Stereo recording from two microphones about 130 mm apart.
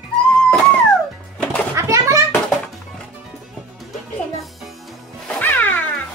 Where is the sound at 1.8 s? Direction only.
25° right (ahead or behind).